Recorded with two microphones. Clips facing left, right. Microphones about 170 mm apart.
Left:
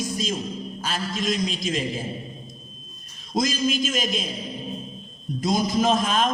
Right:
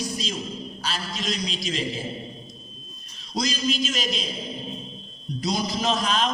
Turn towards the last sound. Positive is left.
turn(degrees=50)  # may be behind; listen again after turning